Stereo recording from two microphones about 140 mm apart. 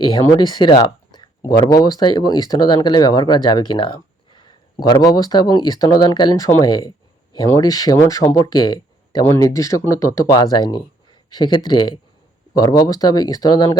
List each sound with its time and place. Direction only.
0.0 s speech: 30° left (ahead or behind)